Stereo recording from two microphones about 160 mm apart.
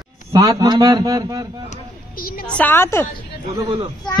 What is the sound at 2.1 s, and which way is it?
Speech, 65° left (ahead or behind).